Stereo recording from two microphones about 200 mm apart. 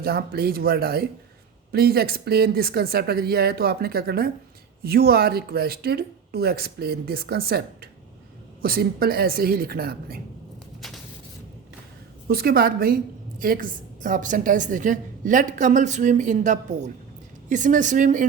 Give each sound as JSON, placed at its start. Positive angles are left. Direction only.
{"t": 0.0, "sound": "a woman's voice", "side_deg": -50}
{"t": 12.3, "sound": "a woman's voice", "side_deg": -50}